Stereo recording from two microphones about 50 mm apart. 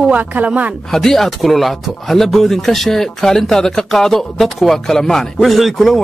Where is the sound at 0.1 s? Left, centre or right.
Right.